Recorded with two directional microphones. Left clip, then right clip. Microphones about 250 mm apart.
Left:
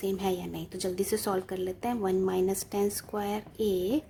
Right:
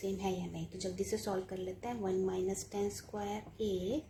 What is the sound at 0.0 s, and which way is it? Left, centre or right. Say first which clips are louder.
A woman's voice: left 7 dB; left.